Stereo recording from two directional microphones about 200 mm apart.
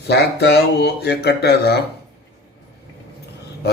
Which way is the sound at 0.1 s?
55° left (ahead or behind).